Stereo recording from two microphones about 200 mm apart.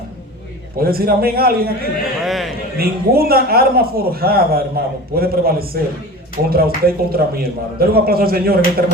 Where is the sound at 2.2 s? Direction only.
Centre (ahead or behind).